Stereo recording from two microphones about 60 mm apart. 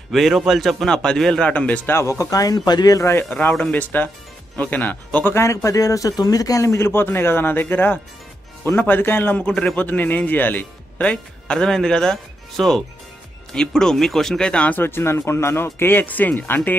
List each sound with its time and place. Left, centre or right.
0.1 s a man's voice: centre
1.4 s speech: left
2.0 s speech: left
3.0 s speech: left
3.3 s speech: left
5.3 s a man's voice: left
6.8 s speech: left
9.5 s speech: centre
9.8 s speech: left
11.0 s speech: centre
14.8 s speech: left